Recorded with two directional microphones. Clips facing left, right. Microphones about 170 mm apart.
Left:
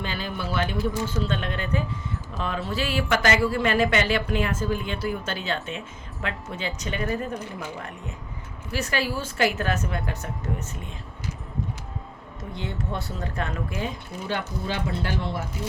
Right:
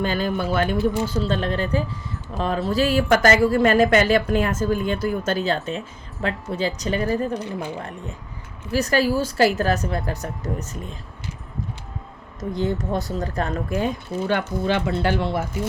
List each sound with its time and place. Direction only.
0.0 s speech: 45° right (ahead or behind)
1.0 s a woman's voice: 35° right (ahead or behind)
12.4 s a woman's voice: 40° right (ahead or behind)
14.3 s speech: 65° right (ahead or behind)